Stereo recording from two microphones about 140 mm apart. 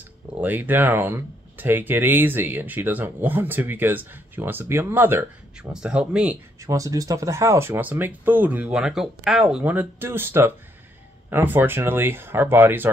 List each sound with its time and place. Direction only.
0.4 s speech: 15° right (ahead or behind)
6.6 s speech: 25° right (ahead or behind)